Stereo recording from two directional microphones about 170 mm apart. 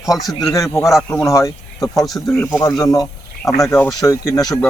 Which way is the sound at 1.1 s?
15° left (ahead or behind).